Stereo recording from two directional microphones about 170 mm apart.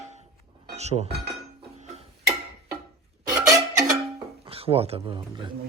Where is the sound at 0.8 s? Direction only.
40° right (ahead or behind).